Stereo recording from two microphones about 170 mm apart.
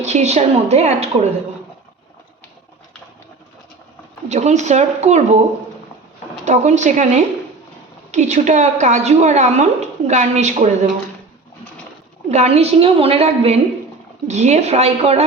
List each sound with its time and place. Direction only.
0.0 s a woman's voice: 40° right (ahead or behind)
4.3 s a woman's voice: 45° right (ahead or behind)
6.4 s a woman's voice: 45° right (ahead or behind)
12.3 s a woman's voice: 40° right (ahead or behind)